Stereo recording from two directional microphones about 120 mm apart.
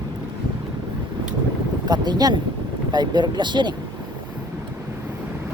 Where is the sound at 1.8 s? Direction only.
35° right (ahead or behind).